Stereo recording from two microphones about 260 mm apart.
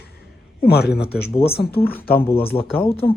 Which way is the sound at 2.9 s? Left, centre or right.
Left.